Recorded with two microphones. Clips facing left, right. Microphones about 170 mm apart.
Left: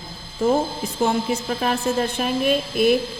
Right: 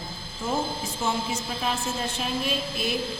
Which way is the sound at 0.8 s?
60° left (ahead or behind).